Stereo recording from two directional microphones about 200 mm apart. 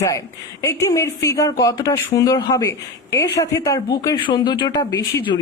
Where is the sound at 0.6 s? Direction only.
15° left (ahead or behind).